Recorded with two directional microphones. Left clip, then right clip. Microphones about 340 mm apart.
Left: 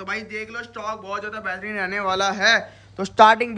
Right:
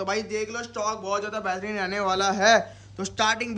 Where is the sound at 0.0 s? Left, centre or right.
Centre.